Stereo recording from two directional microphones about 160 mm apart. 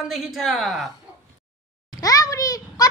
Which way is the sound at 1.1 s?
10° right (ahead or behind).